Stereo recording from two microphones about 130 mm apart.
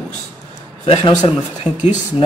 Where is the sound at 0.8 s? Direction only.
45° left (ahead or behind).